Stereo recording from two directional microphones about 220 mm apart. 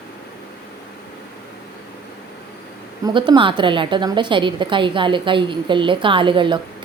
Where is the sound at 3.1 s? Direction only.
20° right (ahead or behind).